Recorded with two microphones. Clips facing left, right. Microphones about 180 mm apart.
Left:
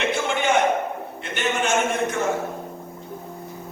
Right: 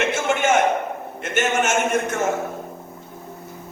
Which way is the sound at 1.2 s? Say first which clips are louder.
Right 4 dB; 45° right (ahead or behind).